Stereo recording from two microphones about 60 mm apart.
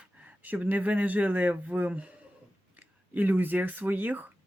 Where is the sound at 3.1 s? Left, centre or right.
Right.